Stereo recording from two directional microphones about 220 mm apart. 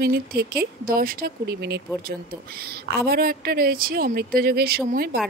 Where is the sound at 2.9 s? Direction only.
45° right (ahead or behind).